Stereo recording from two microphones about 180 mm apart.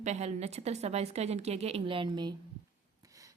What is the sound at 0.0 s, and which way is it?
A woman's voice, 40° right (ahead or behind).